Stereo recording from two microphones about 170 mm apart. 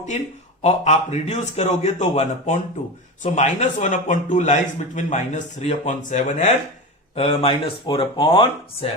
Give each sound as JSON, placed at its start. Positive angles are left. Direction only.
{"t": 0.6, "sound": "a man's voice", "side_deg": 40}